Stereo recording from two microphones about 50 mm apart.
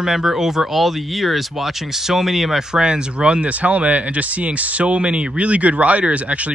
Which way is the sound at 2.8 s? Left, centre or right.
Centre.